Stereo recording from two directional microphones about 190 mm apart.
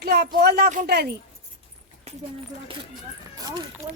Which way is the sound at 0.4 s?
60° right (ahead or behind).